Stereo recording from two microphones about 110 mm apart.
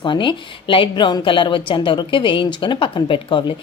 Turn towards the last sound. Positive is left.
turn(degrees=50)  # may be behind; listen again after turning